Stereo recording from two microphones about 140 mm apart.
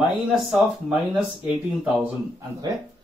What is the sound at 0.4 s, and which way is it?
Speech, 5° right (ahead or behind).